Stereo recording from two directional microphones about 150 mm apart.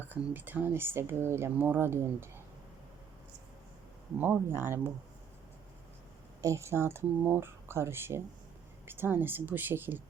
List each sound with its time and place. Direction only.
0.0 s speech: 10° right (ahead or behind)
4.2 s speech: 15° right (ahead or behind)
6.4 s speech: 20° right (ahead or behind)